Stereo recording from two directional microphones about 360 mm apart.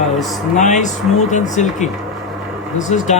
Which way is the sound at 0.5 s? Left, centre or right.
Centre.